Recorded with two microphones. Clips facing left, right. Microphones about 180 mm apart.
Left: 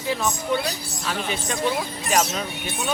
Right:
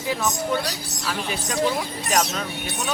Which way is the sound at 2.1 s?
Centre (ahead or behind).